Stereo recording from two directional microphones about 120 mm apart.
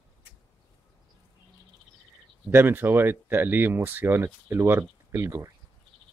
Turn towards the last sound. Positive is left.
turn(degrees=-25)  # may be behind; listen again after turning